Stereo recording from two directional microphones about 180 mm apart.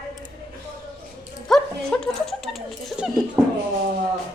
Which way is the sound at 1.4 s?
5° left (ahead or behind).